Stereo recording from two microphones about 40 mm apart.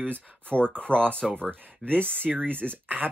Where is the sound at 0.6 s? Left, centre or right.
Left.